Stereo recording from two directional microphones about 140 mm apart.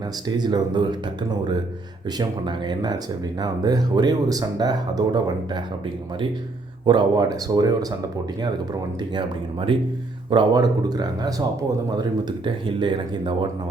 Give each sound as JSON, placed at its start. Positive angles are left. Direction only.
{"t": 0.3, "sound": "speech", "side_deg": -30}
{"t": 2.1, "sound": "speech", "side_deg": -30}
{"t": 6.8, "sound": "speech", "side_deg": -35}
{"t": 9.1, "sound": "speech", "side_deg": -40}
{"t": 12.5, "sound": "speech", "side_deg": -35}